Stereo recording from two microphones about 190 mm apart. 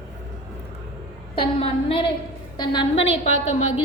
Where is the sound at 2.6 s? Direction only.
30° left (ahead or behind).